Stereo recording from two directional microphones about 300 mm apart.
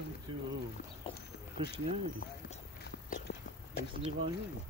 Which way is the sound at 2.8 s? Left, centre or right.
Left.